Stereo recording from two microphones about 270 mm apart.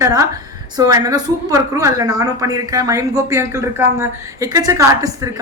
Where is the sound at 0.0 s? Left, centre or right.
Centre.